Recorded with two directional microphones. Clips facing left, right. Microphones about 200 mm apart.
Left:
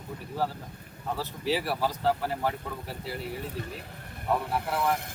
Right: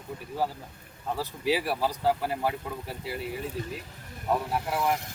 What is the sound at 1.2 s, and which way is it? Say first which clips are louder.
A man's voice: right 2 dB; 15° right (ahead or behind).